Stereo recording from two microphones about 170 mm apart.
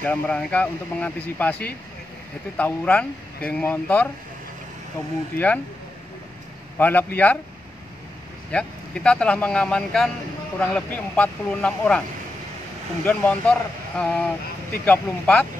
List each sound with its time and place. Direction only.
0.0 s speech: 5° left (ahead or behind)
5.3 s speech: 60° left (ahead or behind)
6.8 s speech: 10° left (ahead or behind)
8.5 s speech: 5° left (ahead or behind)
13.0 s speech: 10° left (ahead or behind)